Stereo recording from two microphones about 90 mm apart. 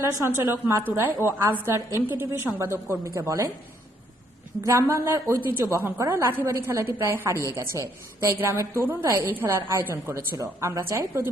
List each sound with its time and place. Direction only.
0.0 s a woman's voice: 35° right (ahead or behind)
4.6 s a woman's voice: 35° right (ahead or behind)